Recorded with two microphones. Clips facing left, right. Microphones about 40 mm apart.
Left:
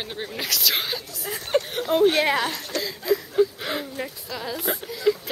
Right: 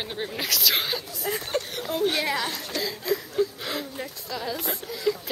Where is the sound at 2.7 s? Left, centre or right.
Centre.